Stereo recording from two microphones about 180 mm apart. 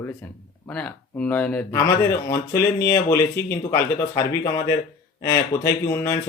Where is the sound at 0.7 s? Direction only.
5° left (ahead or behind).